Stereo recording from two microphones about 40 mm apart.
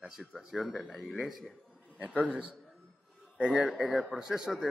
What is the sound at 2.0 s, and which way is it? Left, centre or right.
A man's voice, right.